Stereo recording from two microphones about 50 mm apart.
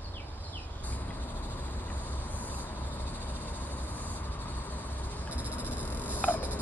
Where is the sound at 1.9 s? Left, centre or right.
Left.